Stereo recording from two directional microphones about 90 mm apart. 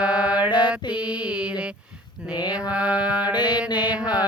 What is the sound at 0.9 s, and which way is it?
Mantra, 15° right (ahead or behind).